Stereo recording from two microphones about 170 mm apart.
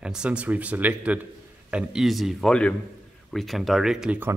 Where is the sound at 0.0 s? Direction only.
5° right (ahead or behind).